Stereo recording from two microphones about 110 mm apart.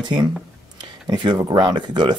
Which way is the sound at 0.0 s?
40° right (ahead or behind).